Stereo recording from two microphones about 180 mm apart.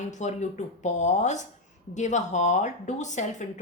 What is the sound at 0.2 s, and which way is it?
Speech, 40° left (ahead or behind).